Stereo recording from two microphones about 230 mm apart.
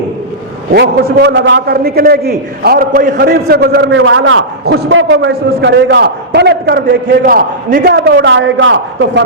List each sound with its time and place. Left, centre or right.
0.7 s a man's voice: right